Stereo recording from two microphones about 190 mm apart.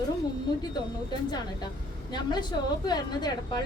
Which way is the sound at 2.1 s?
20° left (ahead or behind).